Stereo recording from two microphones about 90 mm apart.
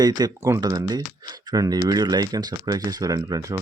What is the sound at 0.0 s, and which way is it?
Speech, 50° right (ahead or behind).